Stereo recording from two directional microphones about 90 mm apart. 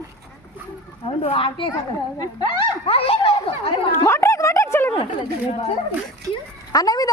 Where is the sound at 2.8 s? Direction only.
90° left.